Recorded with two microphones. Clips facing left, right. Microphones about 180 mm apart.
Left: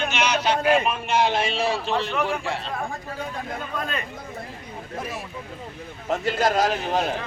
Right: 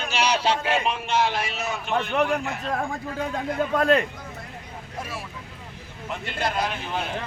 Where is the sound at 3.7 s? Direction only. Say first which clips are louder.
Right 11 dB; 80° right.